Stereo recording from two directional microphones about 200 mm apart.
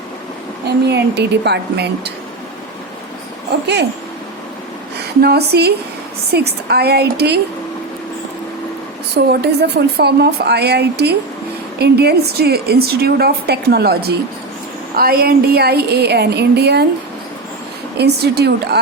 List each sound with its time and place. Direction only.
0.9 s speech: 55° right (ahead or behind)
5.2 s a woman's voice: 55° right (ahead or behind)
9.3 s a woman's voice: 55° right (ahead or behind)
17.9 s speech: 55° right (ahead or behind)